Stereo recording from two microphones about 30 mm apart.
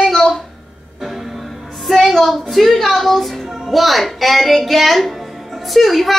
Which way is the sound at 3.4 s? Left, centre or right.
Centre.